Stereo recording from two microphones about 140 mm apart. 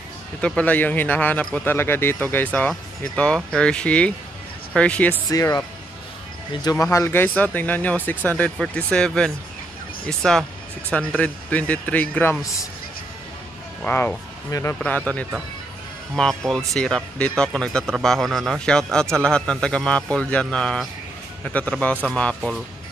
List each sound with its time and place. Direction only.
0.4 s speech: 10° left (ahead or behind)
5.3 s a man's voice: 25° left (ahead or behind)
13.8 s a man's voice: 10° left (ahead or behind)